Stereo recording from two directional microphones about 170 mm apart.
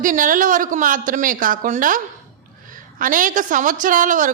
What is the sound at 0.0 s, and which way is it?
A woman's voice, 50° right (ahead or behind).